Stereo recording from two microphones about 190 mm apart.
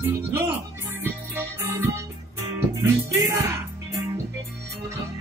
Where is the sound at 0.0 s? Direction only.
10° right (ahead or behind).